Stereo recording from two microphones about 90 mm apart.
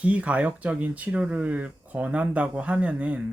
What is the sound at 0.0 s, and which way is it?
Speech, 15° right (ahead or behind).